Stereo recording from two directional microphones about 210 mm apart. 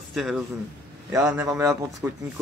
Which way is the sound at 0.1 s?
Centre (ahead or behind).